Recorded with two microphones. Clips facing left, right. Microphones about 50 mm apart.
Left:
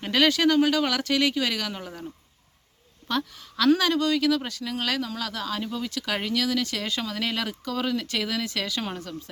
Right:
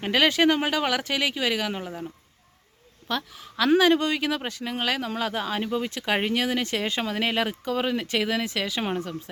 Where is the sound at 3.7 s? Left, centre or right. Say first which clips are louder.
Right 3 dB; right.